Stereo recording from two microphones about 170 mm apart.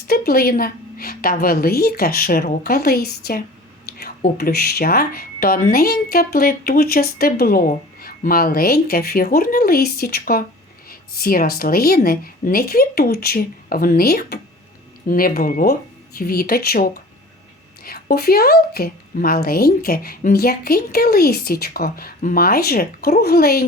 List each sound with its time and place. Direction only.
0.1 s speech: 60° left (ahead or behind)